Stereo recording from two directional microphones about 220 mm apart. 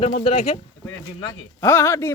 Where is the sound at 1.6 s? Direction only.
10° left (ahead or behind).